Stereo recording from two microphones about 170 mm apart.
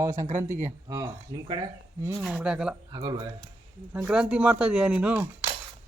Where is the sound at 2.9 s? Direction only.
25° right (ahead or behind).